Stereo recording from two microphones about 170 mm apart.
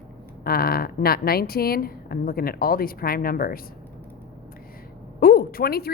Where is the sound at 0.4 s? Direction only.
60° left (ahead or behind).